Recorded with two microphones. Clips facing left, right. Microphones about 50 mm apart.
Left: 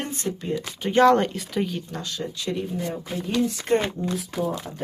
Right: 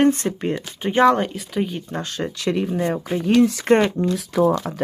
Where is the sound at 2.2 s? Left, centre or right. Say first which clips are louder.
Right 7 dB; right.